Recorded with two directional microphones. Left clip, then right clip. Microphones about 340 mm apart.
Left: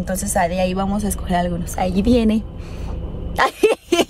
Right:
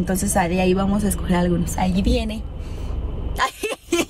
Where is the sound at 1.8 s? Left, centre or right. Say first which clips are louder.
Left 8 dB; centre.